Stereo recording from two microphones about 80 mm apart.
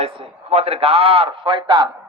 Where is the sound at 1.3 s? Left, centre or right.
Right.